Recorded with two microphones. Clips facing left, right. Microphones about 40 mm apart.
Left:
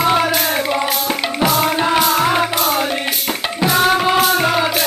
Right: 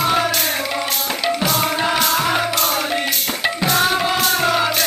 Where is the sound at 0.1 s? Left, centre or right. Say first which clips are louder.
Left 3 dB; centre.